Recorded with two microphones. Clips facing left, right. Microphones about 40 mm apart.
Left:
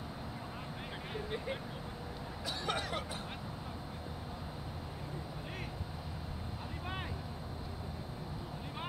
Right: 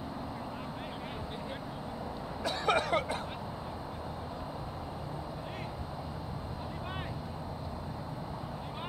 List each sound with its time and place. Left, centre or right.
2.4 s speech: right